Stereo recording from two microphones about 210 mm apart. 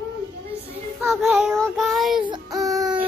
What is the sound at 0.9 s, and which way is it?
Child singing, 5° right (ahead or behind).